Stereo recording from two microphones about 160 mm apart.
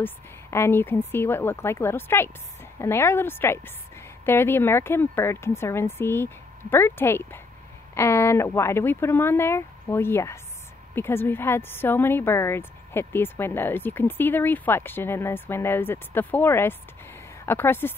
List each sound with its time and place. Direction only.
0.0 s a woman's voice: 15° left (ahead or behind)